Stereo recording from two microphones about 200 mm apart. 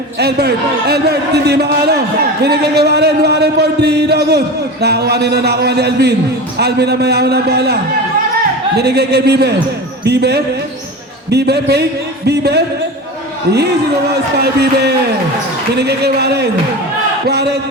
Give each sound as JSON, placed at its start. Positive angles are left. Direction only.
{"t": 0.2, "sound": "a man's voice", "side_deg": -55}
{"t": 14.3, "sound": "a man's voice", "side_deg": -55}